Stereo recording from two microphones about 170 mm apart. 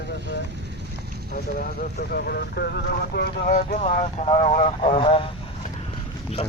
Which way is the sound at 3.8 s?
40° left (ahead or behind).